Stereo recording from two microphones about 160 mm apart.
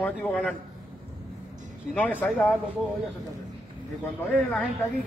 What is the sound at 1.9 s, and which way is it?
Speech, 10° left (ahead or behind).